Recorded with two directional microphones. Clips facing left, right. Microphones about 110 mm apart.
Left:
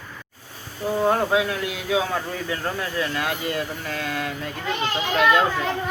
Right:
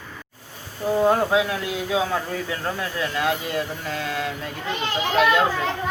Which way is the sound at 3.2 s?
20° right (ahead or behind).